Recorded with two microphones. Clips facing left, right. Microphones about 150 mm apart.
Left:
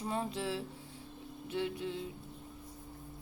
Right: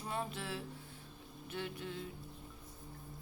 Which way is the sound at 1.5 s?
25° left (ahead or behind).